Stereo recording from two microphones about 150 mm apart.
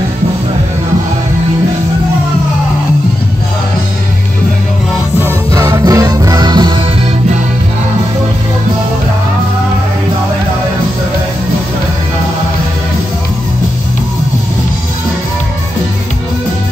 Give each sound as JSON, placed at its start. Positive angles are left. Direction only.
{"t": 5.5, "sound": "music", "side_deg": -20}